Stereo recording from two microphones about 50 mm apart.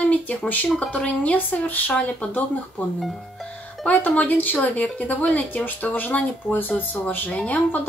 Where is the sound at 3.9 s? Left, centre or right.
Left.